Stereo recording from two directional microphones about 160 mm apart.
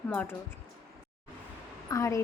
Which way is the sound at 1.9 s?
20° left (ahead or behind).